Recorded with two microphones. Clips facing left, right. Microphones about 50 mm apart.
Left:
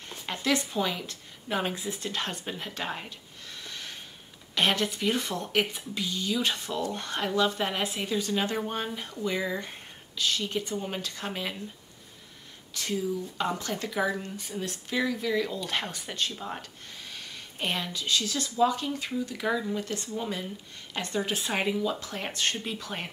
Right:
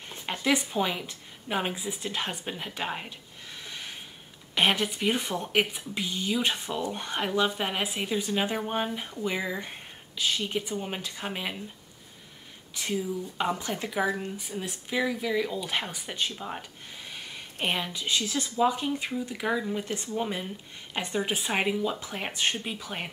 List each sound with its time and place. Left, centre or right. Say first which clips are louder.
0.1 s speech: right 1 dB; centre
12.7 s speech: even; centre